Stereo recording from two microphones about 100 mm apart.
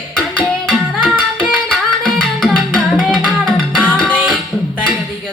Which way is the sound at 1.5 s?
Centre (ahead or behind).